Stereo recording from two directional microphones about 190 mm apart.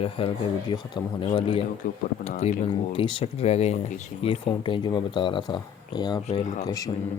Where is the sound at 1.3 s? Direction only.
25° left (ahead or behind).